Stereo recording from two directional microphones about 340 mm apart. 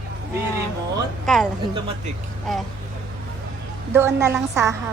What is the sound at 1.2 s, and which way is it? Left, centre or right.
Speech, centre.